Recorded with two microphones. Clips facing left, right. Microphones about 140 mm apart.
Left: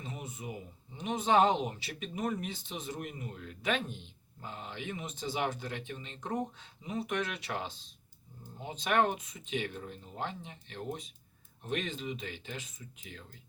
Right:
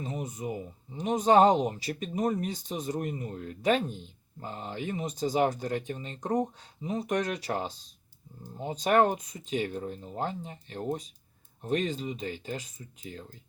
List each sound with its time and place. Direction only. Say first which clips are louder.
0.0 s speech: right 8 dB; 40° right (ahead or behind)